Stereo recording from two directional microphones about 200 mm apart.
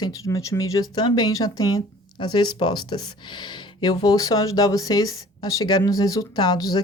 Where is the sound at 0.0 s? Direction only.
15° left (ahead or behind).